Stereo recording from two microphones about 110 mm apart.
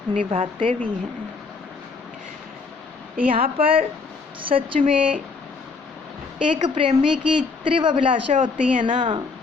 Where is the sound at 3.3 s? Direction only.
55° right (ahead or behind).